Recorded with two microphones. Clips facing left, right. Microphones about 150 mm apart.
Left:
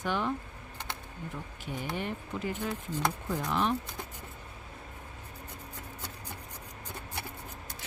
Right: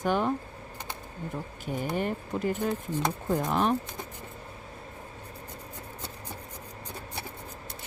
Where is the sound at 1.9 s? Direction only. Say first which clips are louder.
Right 5 dB; 45° right (ahead or behind).